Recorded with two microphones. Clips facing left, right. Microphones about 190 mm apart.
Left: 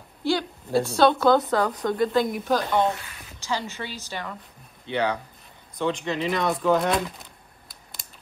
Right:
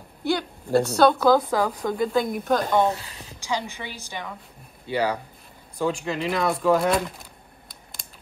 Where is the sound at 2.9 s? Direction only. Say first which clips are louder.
Right 2 dB; 30° right (ahead or behind).